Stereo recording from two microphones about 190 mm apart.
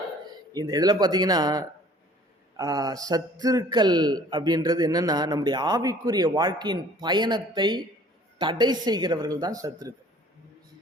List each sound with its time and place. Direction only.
0.5 s a man's voice: 20° right (ahead or behind)